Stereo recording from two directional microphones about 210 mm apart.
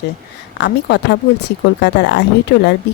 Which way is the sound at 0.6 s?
55° left (ahead or behind).